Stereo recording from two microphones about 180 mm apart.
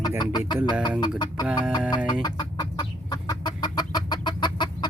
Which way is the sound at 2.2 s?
25° left (ahead or behind).